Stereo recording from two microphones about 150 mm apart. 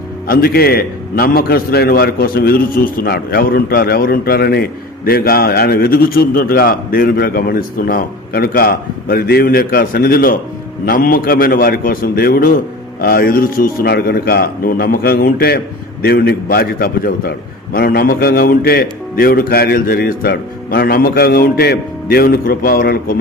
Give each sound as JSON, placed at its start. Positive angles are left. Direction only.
{"t": 0.3, "sound": "a man's voice", "side_deg": 90}
{"t": 10.8, "sound": "a man's voice", "side_deg": 70}